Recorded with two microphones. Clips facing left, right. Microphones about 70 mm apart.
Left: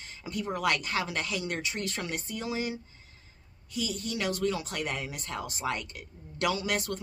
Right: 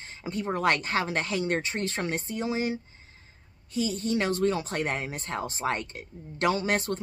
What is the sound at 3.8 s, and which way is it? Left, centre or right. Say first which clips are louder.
Speech: right 6 dB; right.